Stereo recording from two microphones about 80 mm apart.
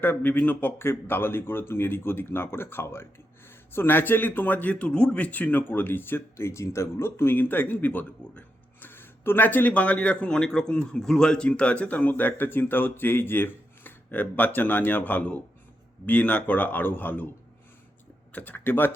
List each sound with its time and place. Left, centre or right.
0.0 s a man's voice: left
18.3 s a man's voice: left